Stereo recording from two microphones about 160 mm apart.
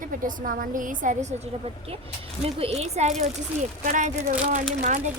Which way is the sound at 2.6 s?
40° right (ahead or behind).